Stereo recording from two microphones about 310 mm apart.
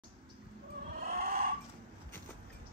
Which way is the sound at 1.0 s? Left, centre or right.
Right.